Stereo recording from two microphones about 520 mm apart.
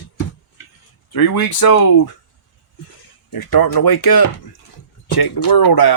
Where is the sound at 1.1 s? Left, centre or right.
Left.